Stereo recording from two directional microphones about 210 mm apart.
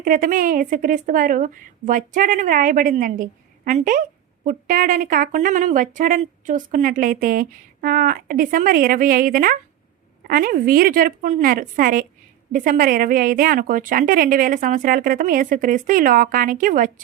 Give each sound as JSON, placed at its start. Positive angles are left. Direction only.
{"t": 0.0, "sound": "a woman's voice", "side_deg": -40}